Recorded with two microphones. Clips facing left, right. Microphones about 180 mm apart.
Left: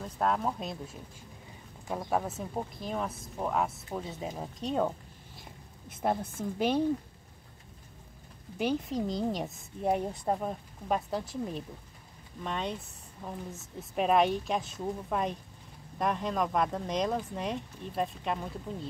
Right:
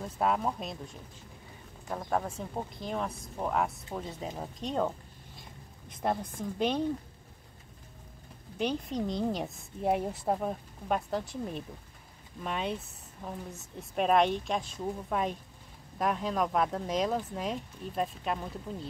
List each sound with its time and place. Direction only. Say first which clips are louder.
0.0 s speech: even; 5° right (ahead or behind)
1.9 s a woman's voice: left 1 dB; 5° left (ahead or behind)
8.5 s speech: left 1 dB; 5° left (ahead or behind)